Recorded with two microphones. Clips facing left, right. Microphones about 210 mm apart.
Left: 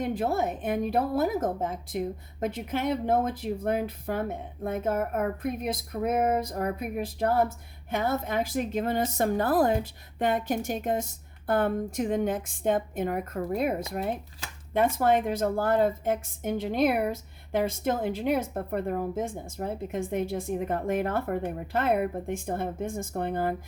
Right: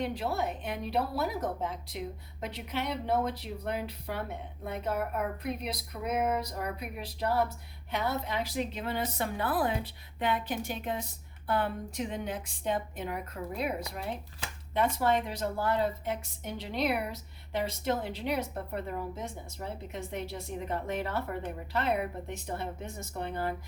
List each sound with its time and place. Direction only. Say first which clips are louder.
0.0 s a woman's voice: left 5 dB; 50° left (ahead or behind)